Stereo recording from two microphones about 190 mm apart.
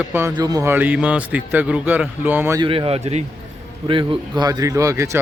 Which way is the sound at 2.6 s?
25° right (ahead or behind).